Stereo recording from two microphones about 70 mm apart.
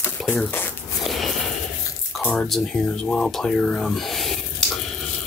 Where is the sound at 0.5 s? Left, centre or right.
Left.